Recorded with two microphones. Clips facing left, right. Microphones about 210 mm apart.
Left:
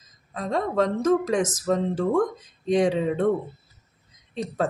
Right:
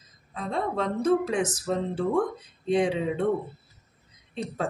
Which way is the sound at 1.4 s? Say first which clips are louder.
Left 4 dB; 90° left.